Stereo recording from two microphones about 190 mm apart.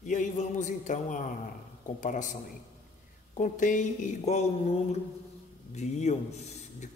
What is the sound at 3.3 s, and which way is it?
Speech, 40° left (ahead or behind).